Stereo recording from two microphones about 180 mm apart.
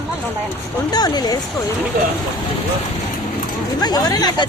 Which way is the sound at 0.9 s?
20° left (ahead or behind).